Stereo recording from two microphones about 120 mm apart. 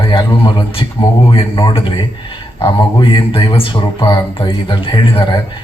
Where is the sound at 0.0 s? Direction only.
45° left (ahead or behind).